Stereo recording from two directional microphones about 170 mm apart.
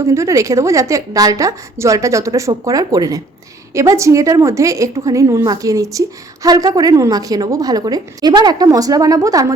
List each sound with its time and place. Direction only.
0.0 s a woman's voice: 15° right (ahead or behind)